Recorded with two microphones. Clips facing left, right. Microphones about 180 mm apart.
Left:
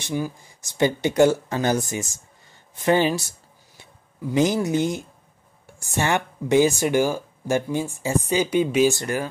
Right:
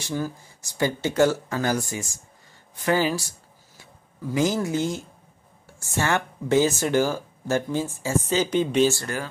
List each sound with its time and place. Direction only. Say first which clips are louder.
0.0 s speech: left 2 dB; 15° left (ahead or behind)
2.7 s a sound: left 3 dB; 25° left (ahead or behind)
4.3 s speech: left 3 dB; 15° left (ahead or behind)